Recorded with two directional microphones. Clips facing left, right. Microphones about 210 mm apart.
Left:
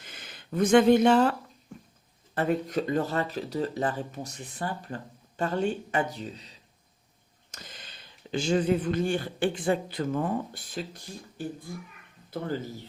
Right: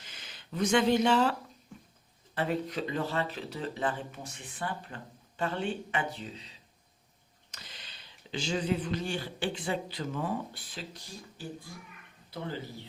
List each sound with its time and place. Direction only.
0.0 s speech: 55° left (ahead or behind)
7.5 s a sound: 45° left (ahead or behind)
8.3 s speech: 50° left (ahead or behind)